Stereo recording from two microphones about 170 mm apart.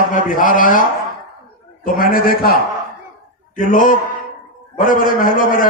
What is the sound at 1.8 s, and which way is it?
Mantra, 55° left (ahead or behind).